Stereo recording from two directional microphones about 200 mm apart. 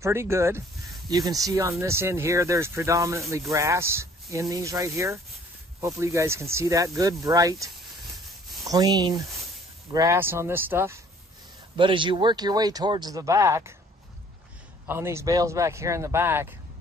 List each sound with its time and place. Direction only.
0.0 s speech: 15° right (ahead or behind)
8.6 s speech: 20° right (ahead or behind)
11.7 s speech: 25° right (ahead or behind)
14.9 s speech: 15° right (ahead or behind)